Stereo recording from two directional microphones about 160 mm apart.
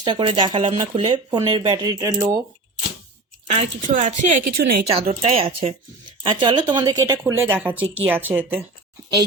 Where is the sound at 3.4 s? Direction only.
45° right (ahead or behind); by 4.8 s 65° right (ahead or behind).